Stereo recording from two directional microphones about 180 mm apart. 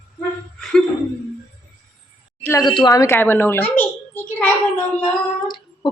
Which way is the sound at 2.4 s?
15° left (ahead or behind).